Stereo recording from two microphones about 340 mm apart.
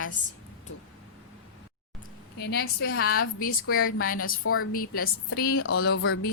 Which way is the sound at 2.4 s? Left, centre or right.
Left.